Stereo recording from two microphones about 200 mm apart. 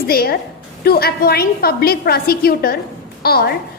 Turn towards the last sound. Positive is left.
turn(degrees=50)  # may be behind; listen again after turning